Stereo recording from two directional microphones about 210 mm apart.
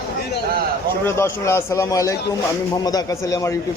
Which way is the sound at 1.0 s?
10° left (ahead or behind).